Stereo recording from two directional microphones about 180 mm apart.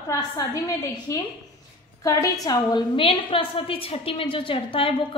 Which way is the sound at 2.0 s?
20° left (ahead or behind).